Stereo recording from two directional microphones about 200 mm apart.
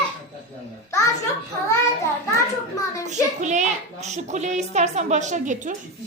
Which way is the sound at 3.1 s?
35° right (ahead or behind).